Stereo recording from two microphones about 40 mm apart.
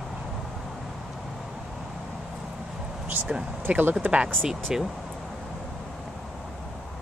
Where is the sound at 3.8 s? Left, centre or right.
Right.